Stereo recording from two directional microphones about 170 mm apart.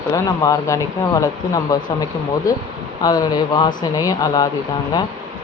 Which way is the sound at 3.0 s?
25° left (ahead or behind).